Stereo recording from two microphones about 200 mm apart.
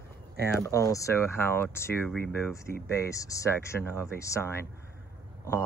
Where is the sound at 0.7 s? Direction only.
15° left (ahead or behind).